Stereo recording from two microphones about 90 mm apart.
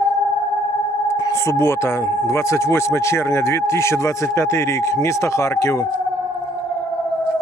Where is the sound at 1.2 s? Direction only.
35° left (ahead or behind).